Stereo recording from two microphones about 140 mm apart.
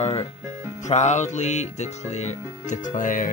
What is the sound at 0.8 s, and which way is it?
Music, 55° left (ahead or behind).